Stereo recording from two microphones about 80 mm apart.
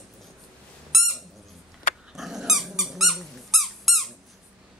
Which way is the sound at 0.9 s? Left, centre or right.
Centre.